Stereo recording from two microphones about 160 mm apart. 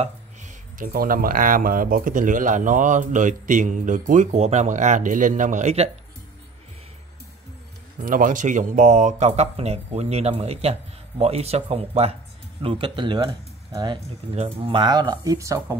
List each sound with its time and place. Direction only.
0.0 s speech: 55° right (ahead or behind)
8.0 s speech: 60° right (ahead or behind); by 13.9 s 25° right (ahead or behind)
14.3 s speech: 40° right (ahead or behind); by 15.8 s 20° right (ahead or behind)